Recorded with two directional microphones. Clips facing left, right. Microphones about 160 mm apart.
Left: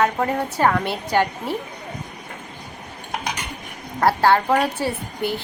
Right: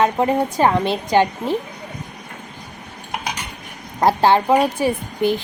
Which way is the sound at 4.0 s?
15° right (ahead or behind).